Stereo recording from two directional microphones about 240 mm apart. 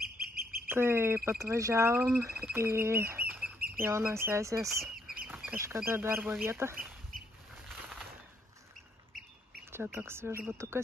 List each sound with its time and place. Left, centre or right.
0.0 s bird: right
0.7 s speech: centre
2.5 s bird: centre
3.8 s speech: centre
9.7 s speech: centre